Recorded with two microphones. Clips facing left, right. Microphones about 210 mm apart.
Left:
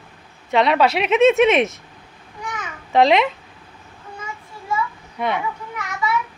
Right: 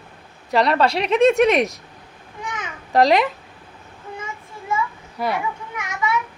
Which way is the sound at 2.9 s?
Centre (ahead or behind).